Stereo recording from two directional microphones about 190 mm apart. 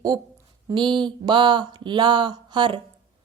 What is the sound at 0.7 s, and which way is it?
A woman's voice, 25° right (ahead or behind).